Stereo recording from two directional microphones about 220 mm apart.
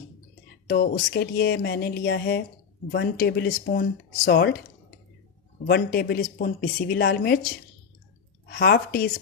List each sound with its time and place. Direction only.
0.7 s speech: 45° left (ahead or behind)
5.6 s speech: 45° left (ahead or behind)
8.4 s speech: 45° left (ahead or behind)